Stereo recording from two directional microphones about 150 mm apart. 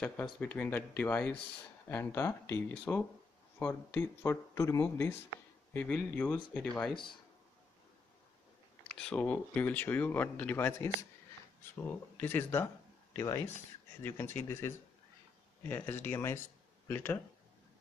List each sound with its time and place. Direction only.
0.0 s speech: 10° left (ahead or behind)
8.9 s speech: 5° left (ahead or behind)